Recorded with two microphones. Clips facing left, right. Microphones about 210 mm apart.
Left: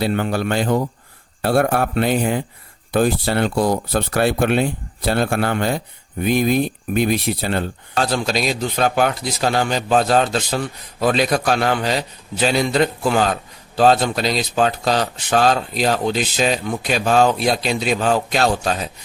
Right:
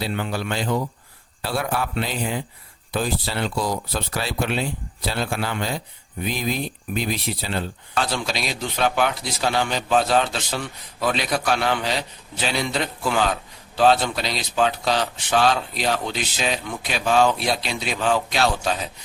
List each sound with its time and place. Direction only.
0.0 s a man's voice: 50° left (ahead or behind)